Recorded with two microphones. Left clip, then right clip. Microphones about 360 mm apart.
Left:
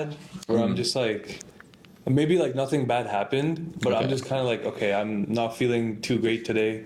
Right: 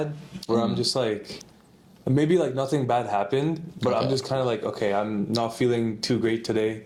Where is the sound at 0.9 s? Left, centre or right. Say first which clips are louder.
Right 1 dB; centre.